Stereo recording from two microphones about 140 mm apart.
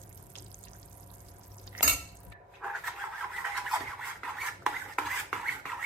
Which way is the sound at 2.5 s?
5° right (ahead or behind).